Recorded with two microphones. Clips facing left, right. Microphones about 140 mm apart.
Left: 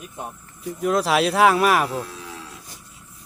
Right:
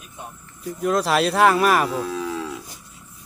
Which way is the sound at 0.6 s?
Centre (ahead or behind).